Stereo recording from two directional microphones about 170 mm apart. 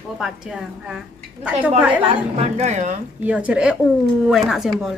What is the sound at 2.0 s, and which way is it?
Speech, 35° right (ahead or behind).